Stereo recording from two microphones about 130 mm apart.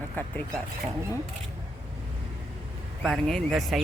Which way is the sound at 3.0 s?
Centre (ahead or behind).